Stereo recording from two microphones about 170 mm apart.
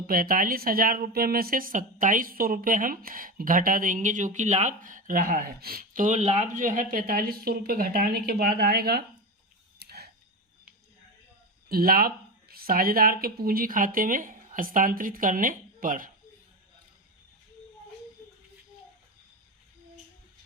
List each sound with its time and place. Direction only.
0.1 s speech: 55° right (ahead or behind)
9.7 s a sound: 70° right (ahead or behind)
11.7 s speech: 60° right (ahead or behind)